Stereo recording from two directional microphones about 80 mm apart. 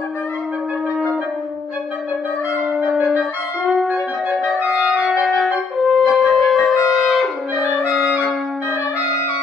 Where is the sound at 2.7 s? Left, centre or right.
Centre.